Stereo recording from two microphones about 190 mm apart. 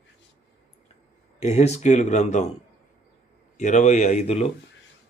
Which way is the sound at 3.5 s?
40° left (ahead or behind).